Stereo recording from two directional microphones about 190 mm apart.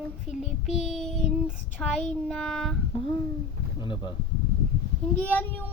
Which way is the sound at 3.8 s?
25° left (ahead or behind).